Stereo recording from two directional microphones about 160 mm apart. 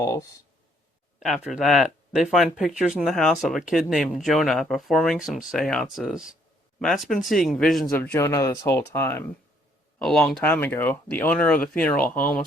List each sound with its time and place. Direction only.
0.0 s speech: 20° left (ahead or behind)
1.2 s speech: centre (ahead or behind)
7.9 s speech: 15° left (ahead or behind)
10.0 s speech: 5° left (ahead or behind)